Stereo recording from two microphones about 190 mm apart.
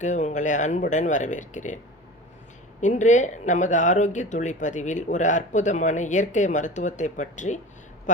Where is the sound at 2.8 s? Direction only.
40° left (ahead or behind).